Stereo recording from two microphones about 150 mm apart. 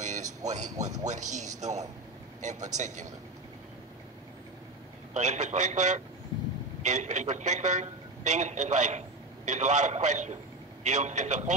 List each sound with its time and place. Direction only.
0.0 s a sound: 55° right (ahead or behind)
0.5 s a man's voice: 50° right (ahead or behind)
5.1 s a man's voice: 50° right (ahead or behind)